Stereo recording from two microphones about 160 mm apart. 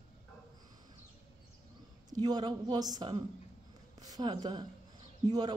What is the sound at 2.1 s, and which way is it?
Speech, 25° right (ahead or behind).